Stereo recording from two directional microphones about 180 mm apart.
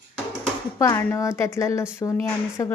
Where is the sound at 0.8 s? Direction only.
15° left (ahead or behind).